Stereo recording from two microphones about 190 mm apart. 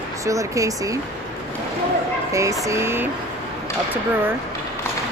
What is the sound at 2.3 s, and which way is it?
Speech, 15° right (ahead or behind).